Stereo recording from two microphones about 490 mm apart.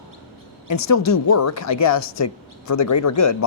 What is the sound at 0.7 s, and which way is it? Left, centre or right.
A woman's voice, left.